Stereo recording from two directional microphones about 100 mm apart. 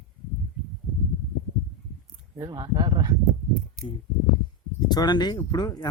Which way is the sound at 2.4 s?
45° right (ahead or behind).